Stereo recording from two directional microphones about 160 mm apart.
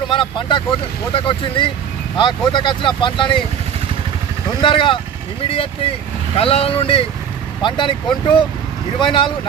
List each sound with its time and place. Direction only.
0.1 s speech: 30° left (ahead or behind)
4.6 s speech: 30° left (ahead or behind)
9.0 s speech: 30° left (ahead or behind)